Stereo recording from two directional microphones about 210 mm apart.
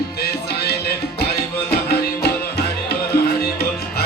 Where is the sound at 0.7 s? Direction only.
50° left (ahead or behind).